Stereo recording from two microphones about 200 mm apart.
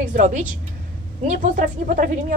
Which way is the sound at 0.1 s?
40° right (ahead or behind).